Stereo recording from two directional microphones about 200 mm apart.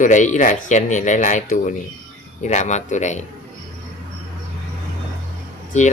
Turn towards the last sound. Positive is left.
turn(degrees=35)  # may be behind; listen again after turning